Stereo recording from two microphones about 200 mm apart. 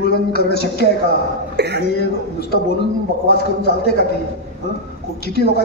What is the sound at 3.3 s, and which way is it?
Speech, 55° left (ahead or behind).